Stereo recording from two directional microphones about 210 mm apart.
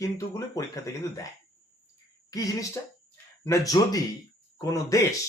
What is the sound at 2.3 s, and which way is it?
Speech, 15° left (ahead or behind).